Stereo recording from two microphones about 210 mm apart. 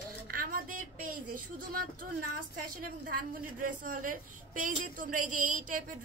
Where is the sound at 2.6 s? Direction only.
40° right (ahead or behind).